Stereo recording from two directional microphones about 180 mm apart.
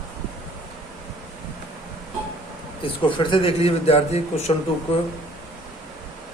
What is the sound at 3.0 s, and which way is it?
A man's voice, 30° left (ahead or behind).